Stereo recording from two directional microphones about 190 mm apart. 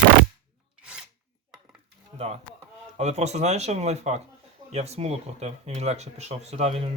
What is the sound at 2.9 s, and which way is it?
Speech, 35° right (ahead or behind).